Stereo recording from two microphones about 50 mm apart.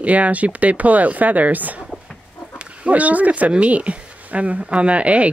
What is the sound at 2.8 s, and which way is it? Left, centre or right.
Speech, right.